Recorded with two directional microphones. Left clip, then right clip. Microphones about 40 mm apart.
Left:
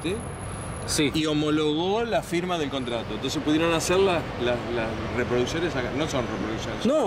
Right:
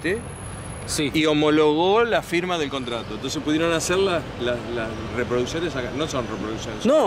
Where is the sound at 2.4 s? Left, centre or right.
Centre.